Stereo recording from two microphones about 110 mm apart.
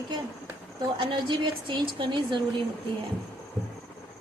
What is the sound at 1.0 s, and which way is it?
A woman's voice, 50° right (ahead or behind).